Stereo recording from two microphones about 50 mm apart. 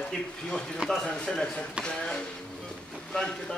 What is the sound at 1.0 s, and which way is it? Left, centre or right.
Speech, centre.